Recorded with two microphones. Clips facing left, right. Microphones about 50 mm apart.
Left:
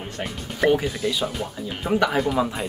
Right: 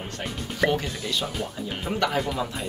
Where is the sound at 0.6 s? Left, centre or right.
Centre.